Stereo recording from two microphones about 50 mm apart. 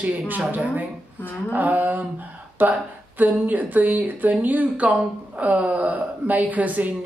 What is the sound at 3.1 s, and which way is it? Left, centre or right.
A woman's voice, right.